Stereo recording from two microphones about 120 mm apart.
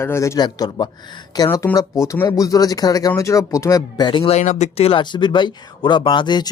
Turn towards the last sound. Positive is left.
turn(degrees=40)  # may be behind; listen again after turning